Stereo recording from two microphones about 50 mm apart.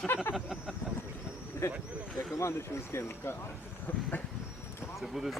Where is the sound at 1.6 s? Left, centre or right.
Left.